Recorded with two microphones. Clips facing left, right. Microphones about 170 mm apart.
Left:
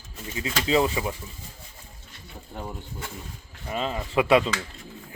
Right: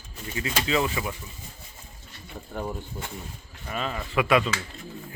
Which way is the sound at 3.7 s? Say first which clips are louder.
Left 2 dB; 25° left (ahead or behind).